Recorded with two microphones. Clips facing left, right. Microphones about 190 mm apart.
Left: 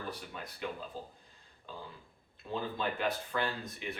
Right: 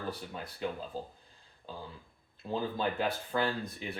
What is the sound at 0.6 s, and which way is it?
Speech, 35° right (ahead or behind).